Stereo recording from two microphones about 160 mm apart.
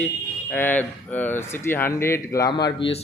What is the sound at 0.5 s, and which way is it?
Speech, 10° left (ahead or behind).